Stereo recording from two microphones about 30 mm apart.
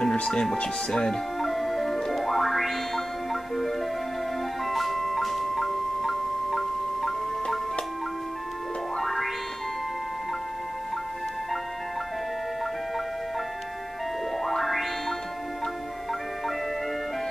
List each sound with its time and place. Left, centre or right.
0.0 s music: left
1.4 s music: centre
4.6 s music: centre
8.9 s music: centre
14.4 s music: centre